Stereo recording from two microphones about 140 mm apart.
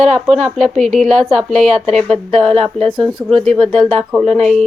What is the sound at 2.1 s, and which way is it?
Speech, 45° right (ahead or behind).